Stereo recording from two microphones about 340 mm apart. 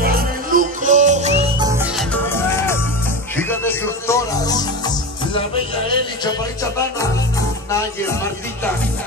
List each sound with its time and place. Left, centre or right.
0.0 s music: right; by 2.0 s centre
2.2 s music: centre
6.2 s speech: centre